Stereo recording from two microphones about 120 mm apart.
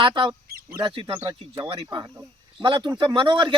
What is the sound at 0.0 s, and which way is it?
A man's voice, 40° right (ahead or behind).